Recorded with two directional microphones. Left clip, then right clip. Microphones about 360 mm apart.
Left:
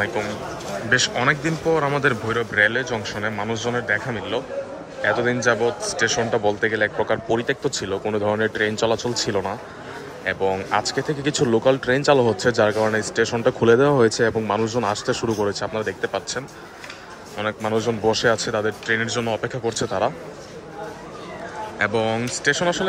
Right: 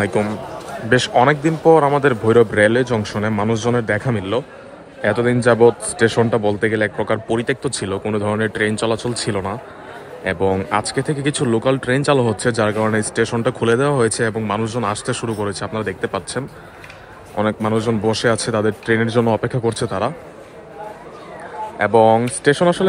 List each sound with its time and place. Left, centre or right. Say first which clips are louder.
0.0 s speech: right 4 dB; centre
17.4 s speech: right 4 dB; centre
21.7 s speech: right 9 dB; centre